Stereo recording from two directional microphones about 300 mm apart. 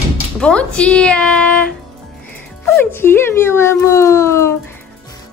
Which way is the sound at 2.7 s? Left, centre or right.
Centre.